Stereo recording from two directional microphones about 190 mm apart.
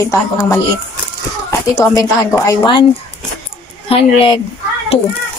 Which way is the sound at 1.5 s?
15° left (ahead or behind).